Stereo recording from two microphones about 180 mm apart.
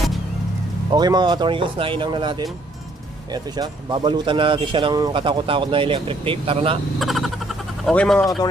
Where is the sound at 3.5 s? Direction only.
25° right (ahead or behind).